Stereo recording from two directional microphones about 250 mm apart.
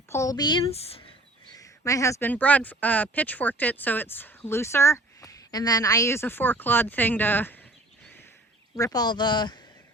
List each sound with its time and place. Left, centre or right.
0.1 s speech: centre
8.7 s speech: centre